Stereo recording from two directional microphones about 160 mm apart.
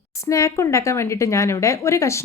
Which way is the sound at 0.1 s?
20° left (ahead or behind).